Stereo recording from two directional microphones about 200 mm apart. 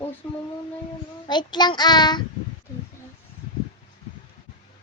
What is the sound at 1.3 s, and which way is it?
Speech, 20° left (ahead or behind).